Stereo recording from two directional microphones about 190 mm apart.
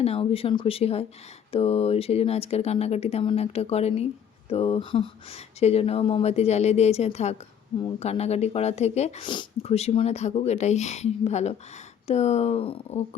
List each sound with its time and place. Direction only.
0.0 s speech: 30° left (ahead or behind)